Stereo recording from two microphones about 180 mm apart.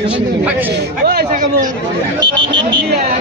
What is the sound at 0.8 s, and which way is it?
Speech, 60° right (ahead or behind).